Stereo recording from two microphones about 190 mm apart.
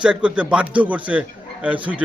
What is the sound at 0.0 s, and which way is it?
A man's voice, 5° right (ahead or behind).